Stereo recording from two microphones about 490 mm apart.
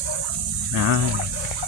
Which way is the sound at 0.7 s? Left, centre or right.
Right.